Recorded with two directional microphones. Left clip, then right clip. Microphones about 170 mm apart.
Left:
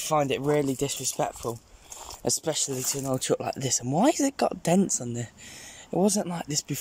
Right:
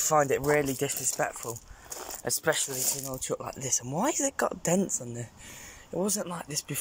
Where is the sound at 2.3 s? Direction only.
25° left (ahead or behind).